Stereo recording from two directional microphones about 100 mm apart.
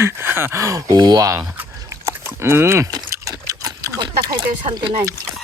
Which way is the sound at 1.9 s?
25° right (ahead or behind).